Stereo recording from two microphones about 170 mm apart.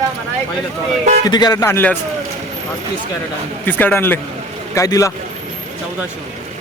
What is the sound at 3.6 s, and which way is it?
A man's voice, 10° left (ahead or behind).